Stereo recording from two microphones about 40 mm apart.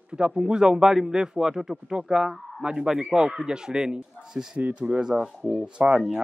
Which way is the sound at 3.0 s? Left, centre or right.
Right.